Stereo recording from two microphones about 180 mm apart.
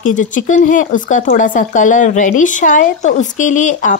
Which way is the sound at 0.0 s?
45° left (ahead or behind).